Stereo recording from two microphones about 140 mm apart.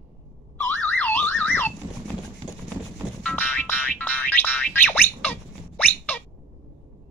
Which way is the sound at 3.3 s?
15° left (ahead or behind).